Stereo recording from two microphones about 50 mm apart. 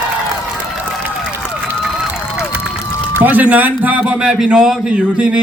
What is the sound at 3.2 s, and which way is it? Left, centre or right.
Speech, right.